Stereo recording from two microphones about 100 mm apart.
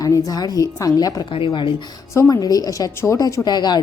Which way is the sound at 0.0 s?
35° left (ahead or behind).